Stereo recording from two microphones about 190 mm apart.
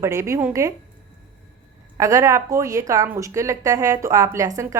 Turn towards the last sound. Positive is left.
turn(degrees=-15)  # may be behind; listen again after turning